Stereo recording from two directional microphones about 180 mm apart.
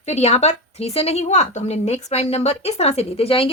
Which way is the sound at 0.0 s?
40° left (ahead or behind).